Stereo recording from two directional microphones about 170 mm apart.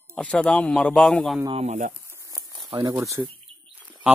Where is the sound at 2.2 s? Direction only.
20° right (ahead or behind).